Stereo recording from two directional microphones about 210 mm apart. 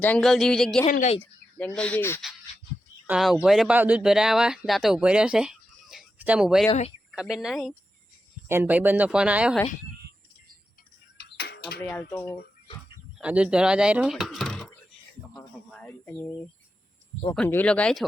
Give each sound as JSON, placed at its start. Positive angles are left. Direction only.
{"t": 0.0, "sound": "speech", "side_deg": 5}
{"t": 0.9, "sound": "speech", "side_deg": 35}
{"t": 1.2, "sound": "speech", "side_deg": 5}
{"t": 3.1, "sound": "speech", "side_deg": 0}
{"t": 6.7, "sound": "speech", "side_deg": 30}
{"t": 7.1, "sound": "speech", "side_deg": 0}
{"t": 11.2, "sound": "a sound", "side_deg": 50}
{"t": 11.8, "sound": "speech", "side_deg": 10}
{"t": 13.1, "sound": "speech", "side_deg": -5}
{"t": 15.7, "sound": "a sound", "side_deg": 5}
{"t": 17.3, "sound": "speech", "side_deg": 5}